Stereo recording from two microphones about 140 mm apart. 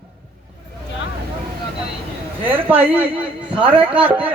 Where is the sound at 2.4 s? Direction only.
15° right (ahead or behind).